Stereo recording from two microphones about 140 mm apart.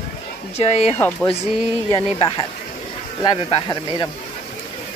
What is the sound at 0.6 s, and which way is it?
Speech, 50° left (ahead or behind).